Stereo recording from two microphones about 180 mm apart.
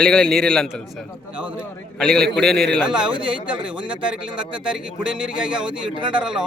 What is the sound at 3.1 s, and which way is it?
Speech, 25° right (ahead or behind).